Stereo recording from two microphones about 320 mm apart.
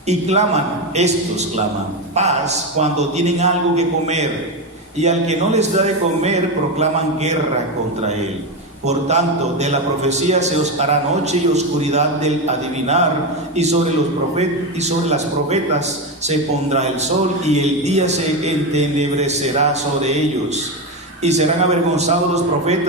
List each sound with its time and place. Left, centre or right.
0.1 s a man's voice: right
8.9 s a man's voice: right
14.3 s a man's voice: right
21.2 s a man's voice: right